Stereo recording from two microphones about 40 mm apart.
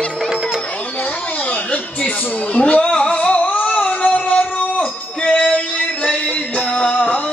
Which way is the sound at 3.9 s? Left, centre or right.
Left.